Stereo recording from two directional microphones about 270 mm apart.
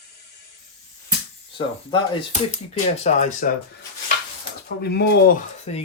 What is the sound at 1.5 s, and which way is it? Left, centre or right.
Speech, left.